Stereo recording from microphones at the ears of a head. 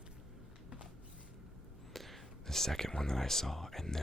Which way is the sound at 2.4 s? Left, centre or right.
Centre.